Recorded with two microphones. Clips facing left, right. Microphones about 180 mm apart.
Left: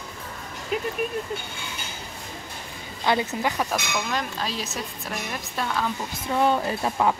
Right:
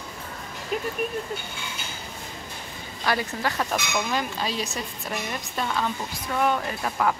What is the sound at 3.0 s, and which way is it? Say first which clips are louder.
Speech: left 3 dB; 20° left (ahead or behind).